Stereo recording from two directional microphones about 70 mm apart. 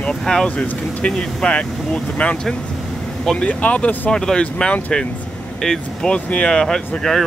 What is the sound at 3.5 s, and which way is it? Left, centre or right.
Speech, centre.